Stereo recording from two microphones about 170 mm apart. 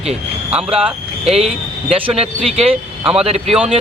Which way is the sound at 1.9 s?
35° right (ahead or behind).